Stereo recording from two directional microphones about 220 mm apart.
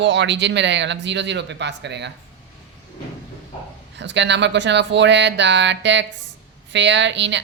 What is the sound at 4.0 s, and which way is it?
A woman's voice, 55° right (ahead or behind).